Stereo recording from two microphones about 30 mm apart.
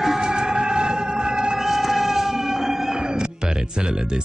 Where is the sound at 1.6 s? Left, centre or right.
Centre.